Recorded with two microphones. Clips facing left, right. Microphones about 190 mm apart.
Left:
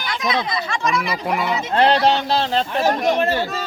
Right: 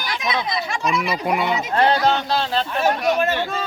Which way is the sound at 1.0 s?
5° right (ahead or behind).